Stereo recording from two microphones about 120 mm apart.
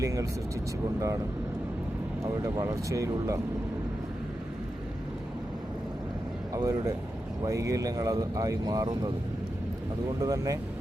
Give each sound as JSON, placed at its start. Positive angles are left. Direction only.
{"t": 0.0, "sound": "speech", "side_deg": -30}
{"t": 2.4, "sound": "speech", "side_deg": -25}
{"t": 6.5, "sound": "speech", "side_deg": -30}
{"t": 10.2, "sound": "speech", "side_deg": -30}